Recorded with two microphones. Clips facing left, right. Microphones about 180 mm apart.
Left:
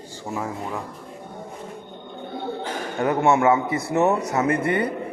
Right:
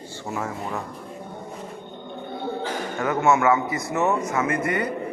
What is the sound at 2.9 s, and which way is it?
A man's voice, 35° left (ahead or behind).